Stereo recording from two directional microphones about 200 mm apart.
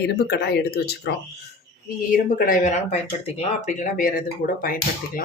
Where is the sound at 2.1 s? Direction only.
45° left (ahead or behind).